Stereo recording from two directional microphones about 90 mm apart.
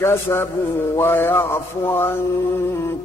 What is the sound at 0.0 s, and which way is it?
Music, 30° left (ahead or behind).